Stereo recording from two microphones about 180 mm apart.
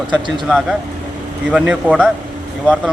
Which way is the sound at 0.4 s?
Centre (ahead or behind).